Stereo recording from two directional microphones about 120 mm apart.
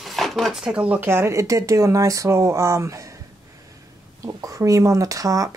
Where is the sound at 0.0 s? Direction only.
Centre (ahead or behind); by 3.2 s 25° right (ahead or behind).